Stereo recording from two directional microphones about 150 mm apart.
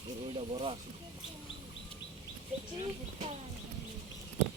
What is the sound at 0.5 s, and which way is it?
Speech, 40° right (ahead or behind).